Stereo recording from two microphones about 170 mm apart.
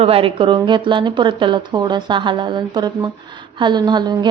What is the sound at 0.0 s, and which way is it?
Speech, 35° right (ahead or behind).